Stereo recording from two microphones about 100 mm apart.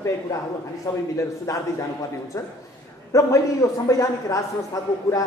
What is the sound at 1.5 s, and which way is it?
Speech, 30° left (ahead or behind).